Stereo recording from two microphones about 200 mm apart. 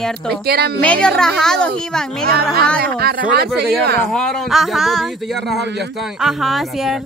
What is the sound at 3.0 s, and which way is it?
Speech, 50° right (ahead or behind).